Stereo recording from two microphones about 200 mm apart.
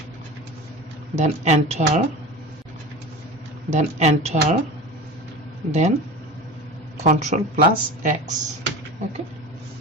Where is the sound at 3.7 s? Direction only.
35° right (ahead or behind).